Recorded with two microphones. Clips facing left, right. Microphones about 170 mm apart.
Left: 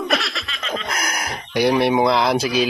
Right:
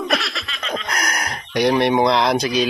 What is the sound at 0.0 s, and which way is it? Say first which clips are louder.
Snicker: even; centre (ahead or behind).